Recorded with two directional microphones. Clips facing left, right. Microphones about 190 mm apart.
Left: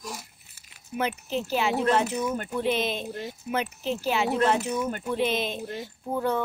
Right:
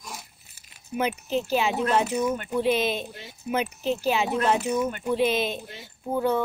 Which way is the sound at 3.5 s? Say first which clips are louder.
Right 3 dB; 15° right (ahead or behind).